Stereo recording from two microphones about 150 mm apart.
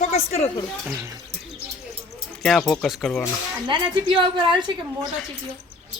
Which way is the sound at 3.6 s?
35° right (ahead or behind).